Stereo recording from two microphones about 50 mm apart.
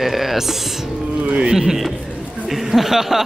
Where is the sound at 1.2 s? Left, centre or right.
Centre.